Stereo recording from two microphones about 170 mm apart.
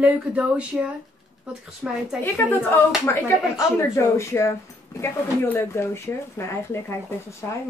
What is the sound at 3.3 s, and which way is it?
A woman's voice, 15° left (ahead or behind).